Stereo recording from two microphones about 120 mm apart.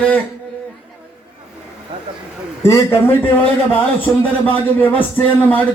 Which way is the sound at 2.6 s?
25° left (ahead or behind).